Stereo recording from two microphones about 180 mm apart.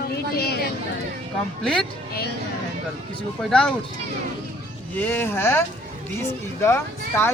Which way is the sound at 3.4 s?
5° left (ahead or behind).